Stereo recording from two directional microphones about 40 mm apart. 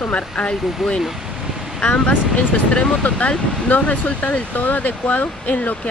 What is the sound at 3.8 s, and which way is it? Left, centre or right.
Speech, left.